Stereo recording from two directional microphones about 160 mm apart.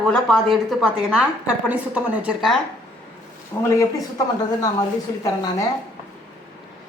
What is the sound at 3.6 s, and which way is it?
A woman's voice, 20° left (ahead or behind).